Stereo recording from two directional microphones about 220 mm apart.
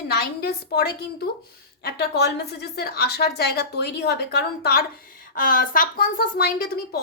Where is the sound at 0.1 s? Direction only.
45° left (ahead or behind).